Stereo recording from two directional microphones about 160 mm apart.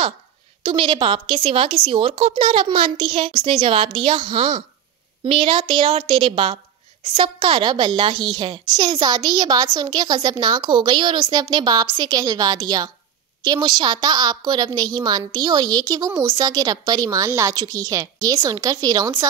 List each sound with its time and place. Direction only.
0.7 s a woman's voice: 35° right (ahead or behind)